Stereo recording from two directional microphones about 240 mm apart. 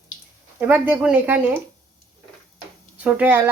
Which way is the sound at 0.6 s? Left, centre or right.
Centre.